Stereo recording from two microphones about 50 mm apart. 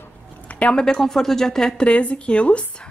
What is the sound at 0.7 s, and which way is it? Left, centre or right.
Speech, centre.